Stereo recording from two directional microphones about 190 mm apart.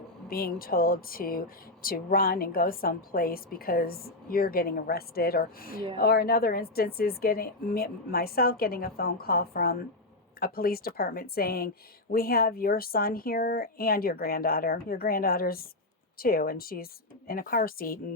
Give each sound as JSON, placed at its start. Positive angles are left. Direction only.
{"t": 0.3, "sound": "speech", "side_deg": 50}